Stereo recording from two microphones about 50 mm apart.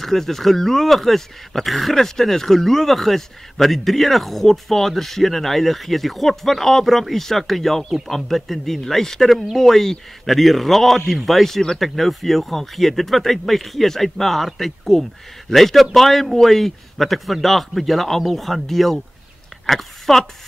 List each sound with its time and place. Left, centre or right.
0.0 s speech: centre